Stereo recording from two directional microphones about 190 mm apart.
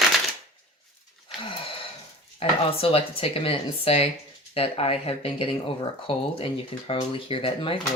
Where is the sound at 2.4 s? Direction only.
30° left (ahead or behind).